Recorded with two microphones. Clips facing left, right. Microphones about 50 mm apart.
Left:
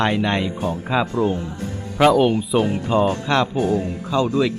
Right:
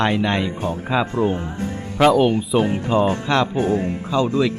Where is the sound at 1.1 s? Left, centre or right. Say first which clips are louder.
Even; right.